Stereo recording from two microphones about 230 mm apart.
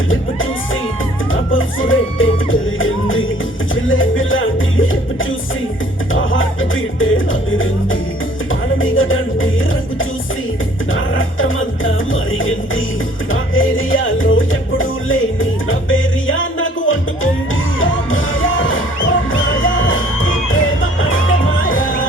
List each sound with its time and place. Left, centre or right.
0.1 s music: left
1.9 s music: left
6.1 s music: left
10.9 s music: left